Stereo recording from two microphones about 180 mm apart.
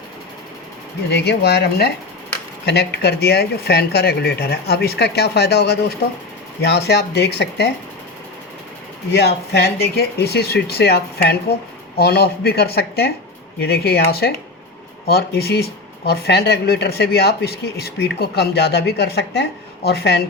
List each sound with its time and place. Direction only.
1.1 s speech: 65° left (ahead or behind)
9.1 s speech: 65° left (ahead or behind)